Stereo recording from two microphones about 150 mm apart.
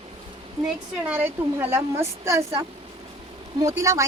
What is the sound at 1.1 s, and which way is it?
A woman's voice, 10° right (ahead or behind).